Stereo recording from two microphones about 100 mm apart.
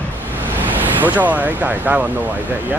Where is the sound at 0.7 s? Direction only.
15° right (ahead or behind).